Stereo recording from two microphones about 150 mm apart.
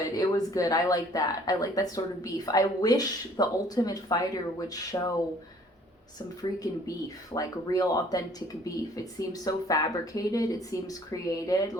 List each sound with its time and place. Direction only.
0.1 s speech: 25° left (ahead or behind)
7.3 s speech: 25° left (ahead or behind)